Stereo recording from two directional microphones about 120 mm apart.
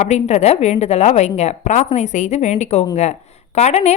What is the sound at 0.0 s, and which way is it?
A woman's voice, 70° left (ahead or behind).